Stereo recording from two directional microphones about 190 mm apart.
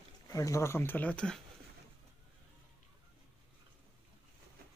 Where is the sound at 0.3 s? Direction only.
15° left (ahead or behind).